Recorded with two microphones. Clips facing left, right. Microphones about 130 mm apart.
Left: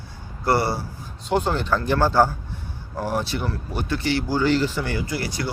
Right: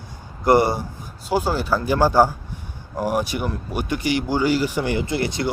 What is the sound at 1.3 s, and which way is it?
Speech, 5° right (ahead or behind).